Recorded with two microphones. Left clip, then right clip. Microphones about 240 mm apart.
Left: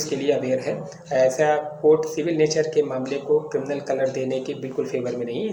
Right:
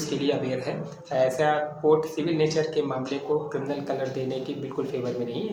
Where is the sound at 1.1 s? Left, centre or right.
Centre.